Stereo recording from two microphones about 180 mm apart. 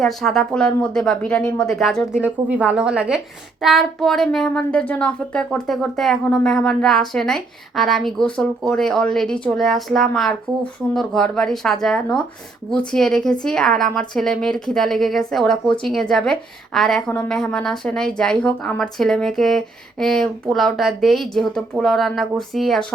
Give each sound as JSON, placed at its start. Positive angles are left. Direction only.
{"t": 0.0, "sound": "a woman's voice", "side_deg": 0}